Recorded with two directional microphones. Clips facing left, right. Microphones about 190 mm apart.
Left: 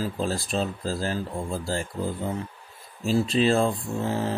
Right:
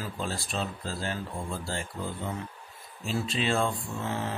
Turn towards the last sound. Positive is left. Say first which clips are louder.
# left 6 dB
turn(degrees=35)  # may be behind; listen again after turning